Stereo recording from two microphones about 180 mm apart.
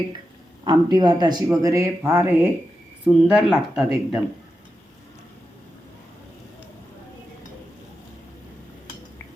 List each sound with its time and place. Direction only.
0.6 s speech: 25° right (ahead or behind); by 4.2 s centre (ahead or behind)